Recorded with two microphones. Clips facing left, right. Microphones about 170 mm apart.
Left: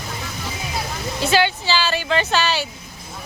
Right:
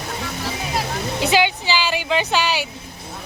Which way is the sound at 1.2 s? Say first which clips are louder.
Even; 15° right (ahead or behind).